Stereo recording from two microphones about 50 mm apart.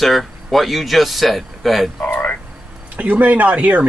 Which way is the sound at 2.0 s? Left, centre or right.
Left.